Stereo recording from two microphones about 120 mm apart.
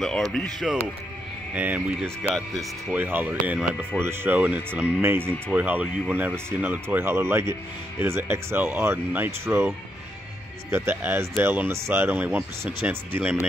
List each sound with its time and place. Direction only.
0.3 s speech: centre (ahead or behind)
1.5 s speech: 10° right (ahead or behind)
4.0 s speech: 20° right (ahead or behind)